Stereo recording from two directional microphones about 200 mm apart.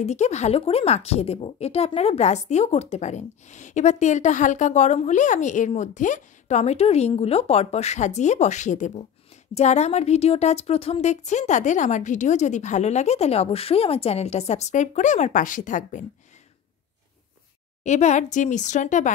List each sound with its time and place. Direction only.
0.0 s a woman's voice: 35° left (ahead or behind)
17.8 s a woman's voice: 35° left (ahead or behind)